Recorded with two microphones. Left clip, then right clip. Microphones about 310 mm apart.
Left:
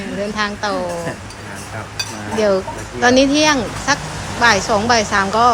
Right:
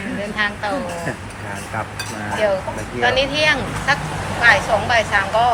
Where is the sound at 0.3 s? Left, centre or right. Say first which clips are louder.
Right 1 dB; centre.